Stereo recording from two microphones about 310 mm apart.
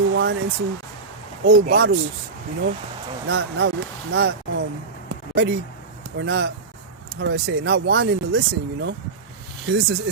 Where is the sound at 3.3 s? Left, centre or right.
Right.